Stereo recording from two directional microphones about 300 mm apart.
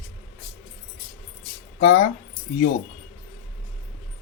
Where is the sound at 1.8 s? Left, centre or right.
Left.